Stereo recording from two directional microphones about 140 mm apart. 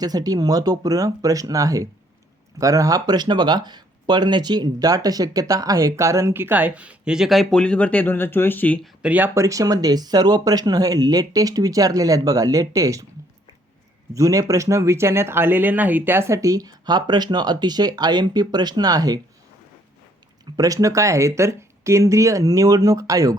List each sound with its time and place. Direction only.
0.0 s speech: 25° right (ahead or behind); by 8.9 s 10° left (ahead or behind)
9.0 s speech: 10° right (ahead or behind)
14.1 s speech: 25° right (ahead or behind)
20.4 s speech: 30° right (ahead or behind)